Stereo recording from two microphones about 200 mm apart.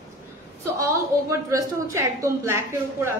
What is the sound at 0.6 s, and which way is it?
A woman's voice, 15° right (ahead or behind).